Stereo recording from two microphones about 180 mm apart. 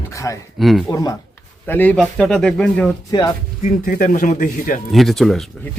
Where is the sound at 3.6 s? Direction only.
45° left (ahead or behind).